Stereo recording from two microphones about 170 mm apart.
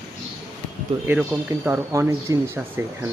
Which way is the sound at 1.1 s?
10° right (ahead or behind).